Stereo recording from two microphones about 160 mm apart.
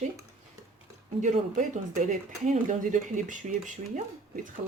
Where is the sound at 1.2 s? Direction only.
50° right (ahead or behind).